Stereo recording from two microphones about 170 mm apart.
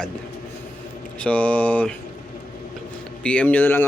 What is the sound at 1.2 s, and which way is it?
Speech, 5° left (ahead or behind).